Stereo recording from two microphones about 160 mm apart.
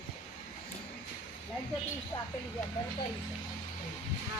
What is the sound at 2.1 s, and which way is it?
Speech, 20° left (ahead or behind).